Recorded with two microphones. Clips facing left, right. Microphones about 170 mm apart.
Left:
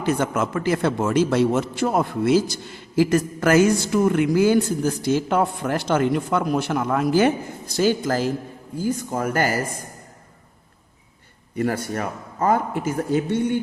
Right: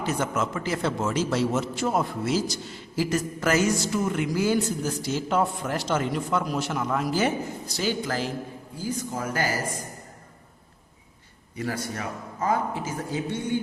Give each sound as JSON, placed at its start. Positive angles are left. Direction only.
{"t": 0.0, "sound": "a man's voice", "side_deg": 55}
{"t": 7.8, "sound": "speech", "side_deg": 45}
{"t": 8.8, "sound": "a man's voice", "side_deg": 55}
{"t": 11.5, "sound": "a man's voice", "side_deg": 55}